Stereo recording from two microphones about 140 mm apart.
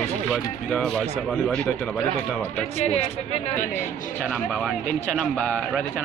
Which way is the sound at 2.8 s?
45° left (ahead or behind).